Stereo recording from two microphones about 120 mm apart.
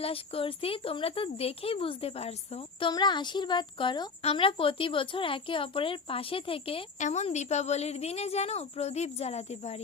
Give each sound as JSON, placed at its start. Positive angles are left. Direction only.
{"t": 0.0, "sound": "speech", "side_deg": 50}
{"t": 2.9, "sound": "speech", "side_deg": 40}
{"t": 4.2, "sound": "speech", "side_deg": 55}
{"t": 7.0, "sound": "a woman's voice", "side_deg": 70}